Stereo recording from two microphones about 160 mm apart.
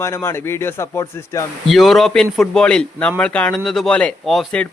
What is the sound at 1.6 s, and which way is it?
A man's voice, centre (ahead or behind).